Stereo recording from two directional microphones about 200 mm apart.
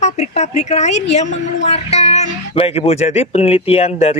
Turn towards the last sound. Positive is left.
turn(degrees=30)  # may be behind; listen again after turning